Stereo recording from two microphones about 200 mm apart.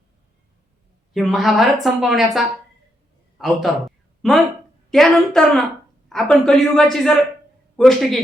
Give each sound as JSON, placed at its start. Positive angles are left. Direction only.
{"t": 1.1, "sound": "a woman's voice", "side_deg": 0}